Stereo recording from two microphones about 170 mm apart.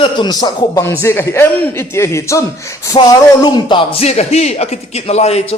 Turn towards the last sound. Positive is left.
turn(degrees=40)  # may be behind; listen again after turning